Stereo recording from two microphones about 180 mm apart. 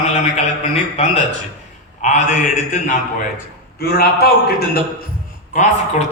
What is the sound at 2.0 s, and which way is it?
Speech, 40° left (ahead or behind).